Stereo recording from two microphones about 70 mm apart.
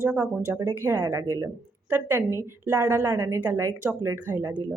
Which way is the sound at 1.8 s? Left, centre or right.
Right.